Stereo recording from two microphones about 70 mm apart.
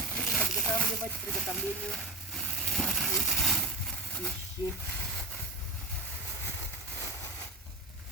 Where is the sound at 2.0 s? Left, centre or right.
Centre.